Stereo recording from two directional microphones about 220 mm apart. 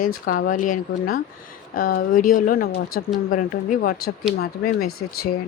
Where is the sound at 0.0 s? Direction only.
40° left (ahead or behind).